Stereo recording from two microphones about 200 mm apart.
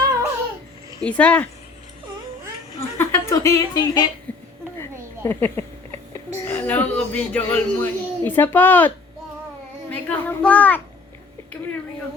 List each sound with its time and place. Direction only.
0.0 s babbling: 20° right (ahead or behind)
1.0 s a child's voice: 5° left (ahead or behind)
3.0 s speech: 15° left (ahead or behind)
4.8 s a sound: 10° left (ahead or behind)
6.1 s speech: 10° left (ahead or behind)
9.9 s a child's voice: 10° left (ahead or behind)